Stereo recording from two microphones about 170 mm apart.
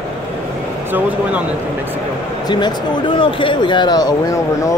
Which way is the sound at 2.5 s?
25° left (ahead or behind).